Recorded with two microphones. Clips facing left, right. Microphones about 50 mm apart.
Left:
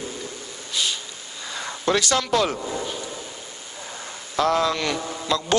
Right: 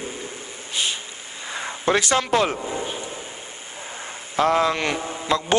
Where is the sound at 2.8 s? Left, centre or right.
Right.